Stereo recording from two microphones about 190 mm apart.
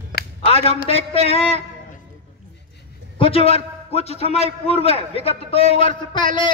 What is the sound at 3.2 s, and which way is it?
A man's voice, 30° left (ahead or behind).